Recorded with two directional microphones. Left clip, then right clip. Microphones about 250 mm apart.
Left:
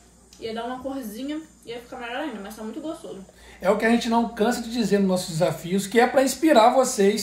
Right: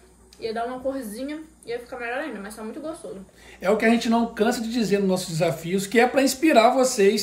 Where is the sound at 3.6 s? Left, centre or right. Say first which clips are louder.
Even; centre.